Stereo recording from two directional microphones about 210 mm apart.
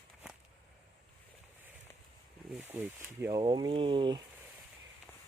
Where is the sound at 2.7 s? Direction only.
10° right (ahead or behind).